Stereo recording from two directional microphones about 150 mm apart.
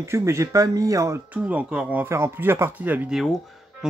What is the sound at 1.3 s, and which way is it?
Speech, 10° right (ahead or behind).